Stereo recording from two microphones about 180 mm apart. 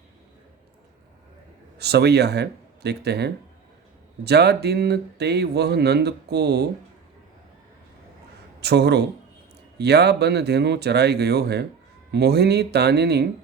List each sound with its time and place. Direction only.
1.8 s speech: 65° right (ahead or behind)
8.6 s speech: 65° right (ahead or behind)